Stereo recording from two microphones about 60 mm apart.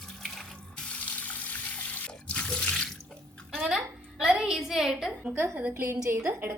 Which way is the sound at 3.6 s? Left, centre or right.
Centre.